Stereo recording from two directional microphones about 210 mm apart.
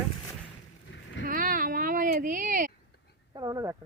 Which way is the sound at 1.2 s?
40° right (ahead or behind).